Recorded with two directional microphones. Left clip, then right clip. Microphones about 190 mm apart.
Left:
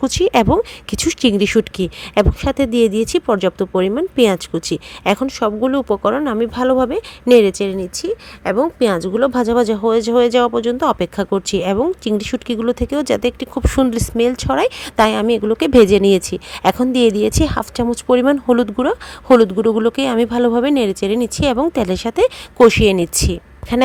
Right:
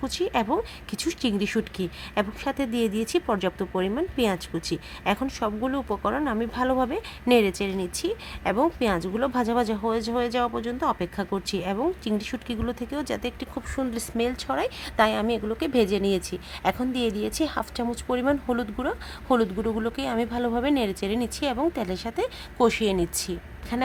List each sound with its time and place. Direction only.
0.0 s speech: 40° left (ahead or behind)